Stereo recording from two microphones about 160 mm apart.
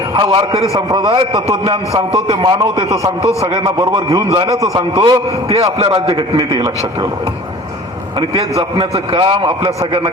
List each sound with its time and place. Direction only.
0.2 s a man's voice: 30° right (ahead or behind)
3.6 s a man's voice: 20° right (ahead or behind)
4.3 s a man's voice: 35° right (ahead or behind)
4.6 s a man's voice: 25° right (ahead or behind)
5.5 s a man's voice: 40° right (ahead or behind)
8.5 s a man's voice: 30° right (ahead or behind)